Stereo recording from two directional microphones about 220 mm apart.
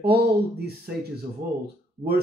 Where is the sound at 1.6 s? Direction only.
45° right (ahead or behind).